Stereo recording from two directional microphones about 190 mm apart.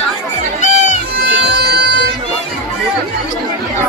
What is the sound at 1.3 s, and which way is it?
Bagpipes, 60° right (ahead or behind).